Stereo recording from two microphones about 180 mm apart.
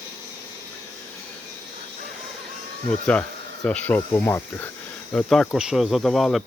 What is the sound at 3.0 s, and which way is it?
Speech, 5° left (ahead or behind).